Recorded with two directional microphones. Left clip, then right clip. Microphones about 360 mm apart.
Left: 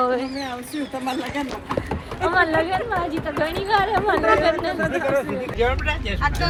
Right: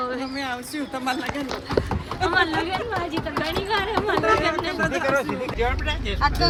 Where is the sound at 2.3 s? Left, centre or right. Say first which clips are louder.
Left 4 dB; centre.